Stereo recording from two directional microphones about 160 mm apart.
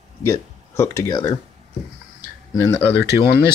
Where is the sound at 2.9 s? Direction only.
85° left.